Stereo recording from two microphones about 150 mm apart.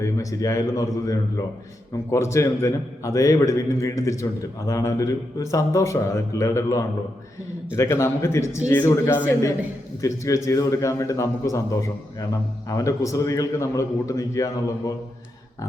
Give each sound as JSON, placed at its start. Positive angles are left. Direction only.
{"t": 0.0, "sound": "a man's voice", "side_deg": 20}